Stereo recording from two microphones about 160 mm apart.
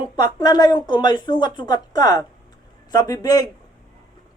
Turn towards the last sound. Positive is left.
turn(degrees=25)  # may be behind; listen again after turning